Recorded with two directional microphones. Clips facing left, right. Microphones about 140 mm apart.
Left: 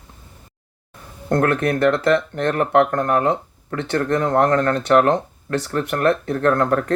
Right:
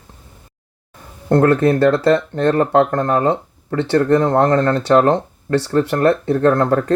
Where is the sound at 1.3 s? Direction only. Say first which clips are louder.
Right 5 dB; 30° right (ahead or behind).